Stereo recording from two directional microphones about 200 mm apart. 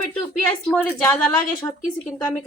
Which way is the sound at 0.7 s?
10° left (ahead or behind).